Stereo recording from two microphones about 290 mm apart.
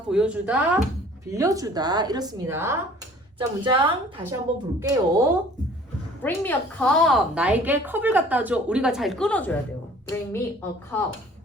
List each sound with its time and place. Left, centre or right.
0.1 s a woman's voice: centre
6.2 s a woman's voice: centre